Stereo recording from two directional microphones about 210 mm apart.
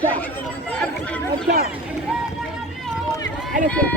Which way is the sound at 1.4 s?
45° right (ahead or behind).